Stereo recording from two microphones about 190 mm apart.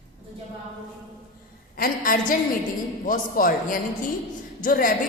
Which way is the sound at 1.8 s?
45° left (ahead or behind).